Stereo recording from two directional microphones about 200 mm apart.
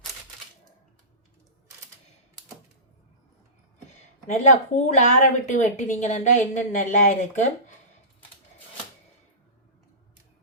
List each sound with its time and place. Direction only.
4.3 s a woman's voice: 35° left (ahead or behind)